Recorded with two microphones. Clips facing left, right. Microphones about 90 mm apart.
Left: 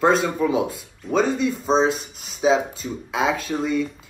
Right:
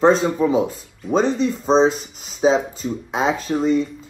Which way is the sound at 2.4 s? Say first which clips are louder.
Right 2 dB; 35° right (ahead or behind).